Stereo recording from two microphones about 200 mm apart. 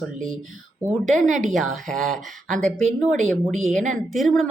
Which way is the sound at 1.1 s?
40° right (ahead or behind).